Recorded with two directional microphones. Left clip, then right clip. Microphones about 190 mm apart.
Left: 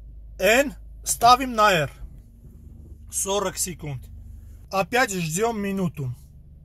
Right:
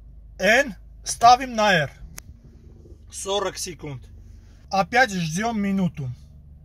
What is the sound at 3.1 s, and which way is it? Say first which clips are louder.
Speech: even; 5° left (ahead or behind).